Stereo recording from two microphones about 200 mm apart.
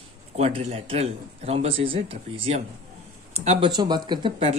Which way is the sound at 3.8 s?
20° right (ahead or behind).